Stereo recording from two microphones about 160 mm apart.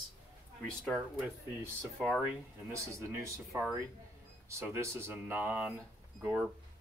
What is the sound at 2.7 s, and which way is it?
Speech, 20° right (ahead or behind).